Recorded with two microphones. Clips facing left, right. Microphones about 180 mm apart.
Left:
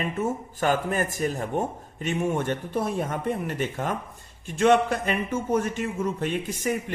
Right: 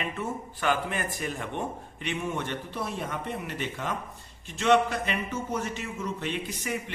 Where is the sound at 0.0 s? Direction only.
40° left (ahead or behind).